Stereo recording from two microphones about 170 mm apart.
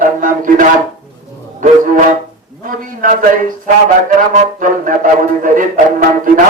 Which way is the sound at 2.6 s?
50° right (ahead or behind).